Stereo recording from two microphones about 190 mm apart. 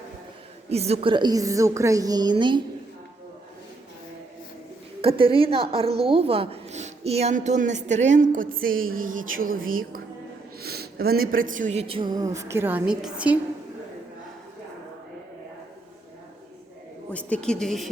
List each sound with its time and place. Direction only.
0.7 s a woman's voice: 35° right (ahead or behind)
5.0 s a woman's voice: 30° right (ahead or behind); by 13.4 s 5° right (ahead or behind)
17.1 s speech: 5° left (ahead or behind)